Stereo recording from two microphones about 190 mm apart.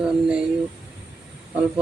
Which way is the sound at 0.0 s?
5° right (ahead or behind).